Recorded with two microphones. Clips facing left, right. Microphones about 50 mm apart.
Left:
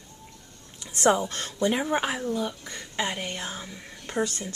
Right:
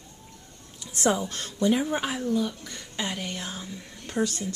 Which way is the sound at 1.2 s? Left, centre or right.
Left.